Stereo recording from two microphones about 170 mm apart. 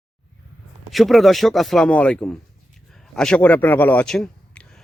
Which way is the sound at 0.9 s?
Centre (ahead or behind).